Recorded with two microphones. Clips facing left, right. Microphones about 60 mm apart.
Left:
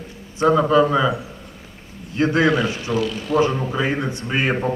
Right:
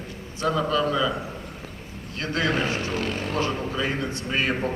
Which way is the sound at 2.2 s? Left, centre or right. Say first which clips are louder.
Left 10 dB; left.